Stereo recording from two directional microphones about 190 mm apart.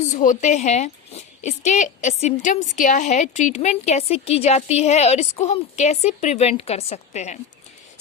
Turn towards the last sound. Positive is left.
turn(degrees=35)  # may be behind; listen again after turning